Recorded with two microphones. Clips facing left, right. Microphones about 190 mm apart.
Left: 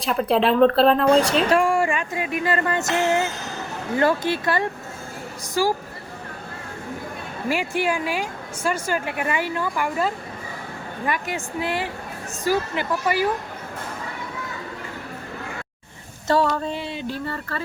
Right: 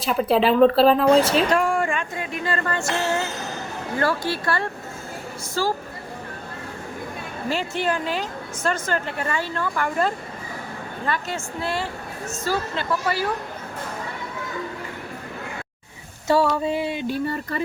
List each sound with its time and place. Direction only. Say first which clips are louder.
0.0 s speech: right 1 dB; centre (ahead or behind)
7.5 s speech: left 1 dB; 15° left (ahead or behind)
16.2 s a sound: right 1 dB; 10° right (ahead or behind)